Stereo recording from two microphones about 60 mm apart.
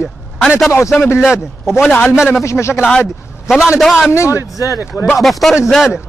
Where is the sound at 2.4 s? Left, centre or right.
Left.